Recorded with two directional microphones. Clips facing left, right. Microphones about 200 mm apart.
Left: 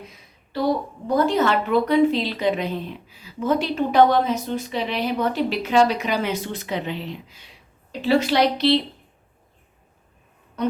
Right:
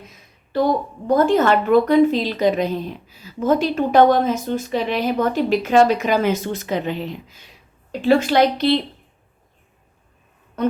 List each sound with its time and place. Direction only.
1.0 s a woman's voice: 50° right (ahead or behind)